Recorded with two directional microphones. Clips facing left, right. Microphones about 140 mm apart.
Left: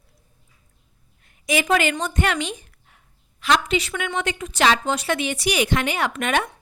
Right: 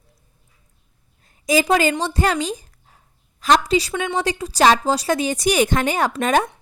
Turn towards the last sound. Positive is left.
turn(degrees=-35)  # may be behind; listen again after turning